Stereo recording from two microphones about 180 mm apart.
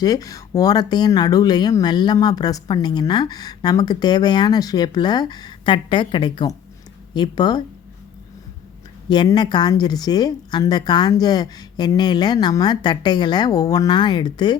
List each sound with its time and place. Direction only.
0.0 s speech: 20° left (ahead or behind)
9.0 s speech: 25° left (ahead or behind)